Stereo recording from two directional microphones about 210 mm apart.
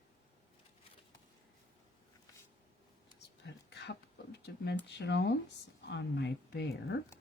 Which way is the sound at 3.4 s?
55° left (ahead or behind).